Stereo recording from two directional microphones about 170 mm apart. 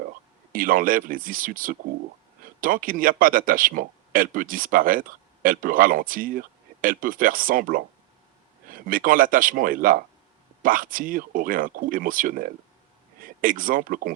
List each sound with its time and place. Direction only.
0.5 s speech: 55° right (ahead or behind)